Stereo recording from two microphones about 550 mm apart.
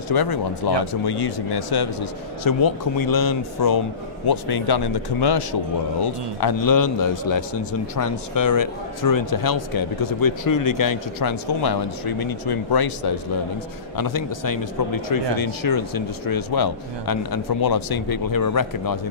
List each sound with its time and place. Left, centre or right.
0.1 s a man's voice: left